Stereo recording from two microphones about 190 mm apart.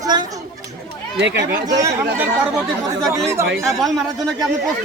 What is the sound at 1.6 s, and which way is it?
Speech, 20° right (ahead or behind).